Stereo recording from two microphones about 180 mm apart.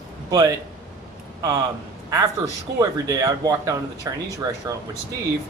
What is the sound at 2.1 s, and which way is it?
Speech, 20° right (ahead or behind).